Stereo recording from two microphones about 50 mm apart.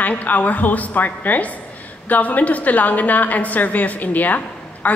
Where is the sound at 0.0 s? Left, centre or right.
Left.